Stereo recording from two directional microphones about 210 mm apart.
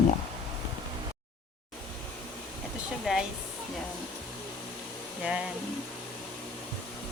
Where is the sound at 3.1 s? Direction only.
5° right (ahead or behind).